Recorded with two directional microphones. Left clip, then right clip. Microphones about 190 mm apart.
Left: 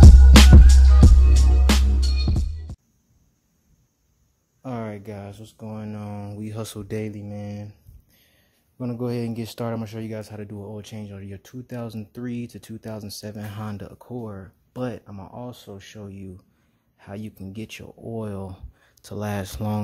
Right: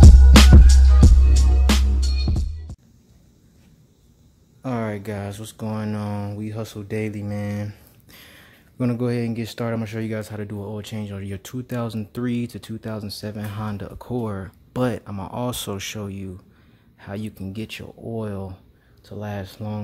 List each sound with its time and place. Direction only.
0.0 s music: centre (ahead or behind)
4.6 s speech: centre (ahead or behind)
6.3 s speech: 20° left (ahead or behind)
7.1 s speech: 10° left (ahead or behind)
7.6 s a sound: 20° right (ahead or behind)
9.0 s speech: 10° left (ahead or behind); by 16.1 s 15° right (ahead or behind)
16.1 s speech: centre (ahead or behind); by 18.6 s 15° left (ahead or behind)
19.0 s speech: 30° left (ahead or behind)